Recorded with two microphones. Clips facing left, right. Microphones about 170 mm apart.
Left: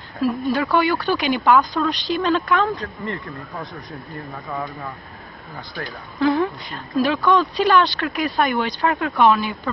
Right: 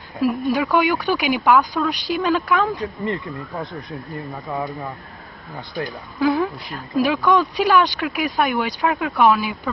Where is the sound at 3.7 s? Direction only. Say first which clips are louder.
Right 3 dB; 65° right (ahead or behind).